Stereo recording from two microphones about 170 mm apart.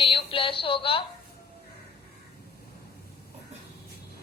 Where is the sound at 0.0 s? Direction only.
30° left (ahead or behind).